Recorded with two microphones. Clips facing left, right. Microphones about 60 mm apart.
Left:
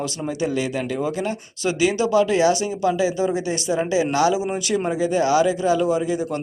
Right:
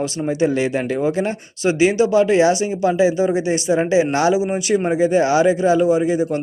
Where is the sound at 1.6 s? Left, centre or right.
Right.